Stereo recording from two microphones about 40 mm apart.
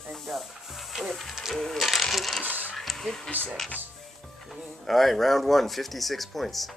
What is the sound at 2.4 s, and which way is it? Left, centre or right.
Speech, right.